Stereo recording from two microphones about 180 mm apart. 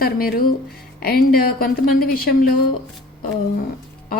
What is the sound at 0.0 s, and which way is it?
A woman's voice, 55° left (ahead or behind).